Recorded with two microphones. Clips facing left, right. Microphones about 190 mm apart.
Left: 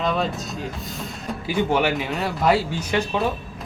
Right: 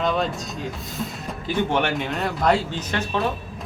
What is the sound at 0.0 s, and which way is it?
A man's voice, centre (ahead or behind).